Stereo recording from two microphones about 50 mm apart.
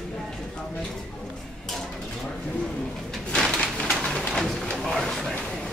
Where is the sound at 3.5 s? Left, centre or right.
Centre.